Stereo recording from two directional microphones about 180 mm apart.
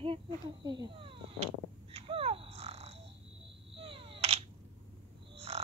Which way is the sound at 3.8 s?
30° right (ahead or behind).